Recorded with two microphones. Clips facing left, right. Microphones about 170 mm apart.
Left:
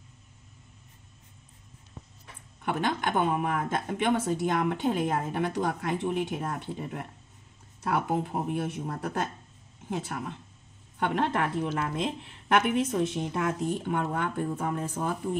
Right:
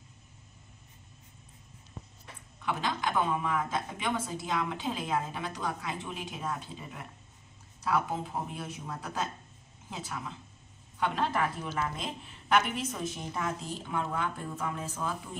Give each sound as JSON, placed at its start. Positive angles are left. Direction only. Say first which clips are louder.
{"t": 2.6, "sound": "a woman's voice", "louder": "left 4 dB", "side_deg": 55}
{"t": 12.5, "sound": "a woman's voice", "louder": "left 5 dB", "side_deg": 60}